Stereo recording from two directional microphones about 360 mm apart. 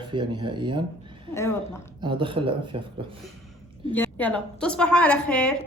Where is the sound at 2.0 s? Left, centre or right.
Centre.